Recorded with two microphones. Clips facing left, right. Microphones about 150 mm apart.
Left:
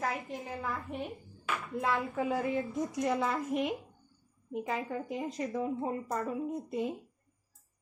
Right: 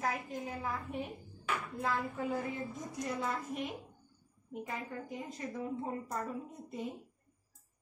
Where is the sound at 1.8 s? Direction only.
85° left.